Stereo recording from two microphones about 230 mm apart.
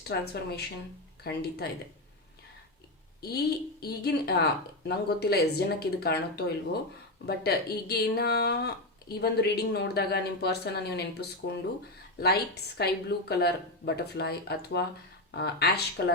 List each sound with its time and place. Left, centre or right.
0.1 s speech: left
3.2 s speech: left